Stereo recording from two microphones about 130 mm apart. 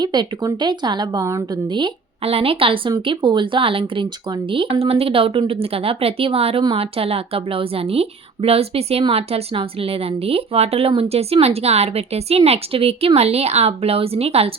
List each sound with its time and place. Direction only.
0.0 s a woman's voice: 35° right (ahead or behind)
1.7 s a woman's voice: 45° right (ahead or behind)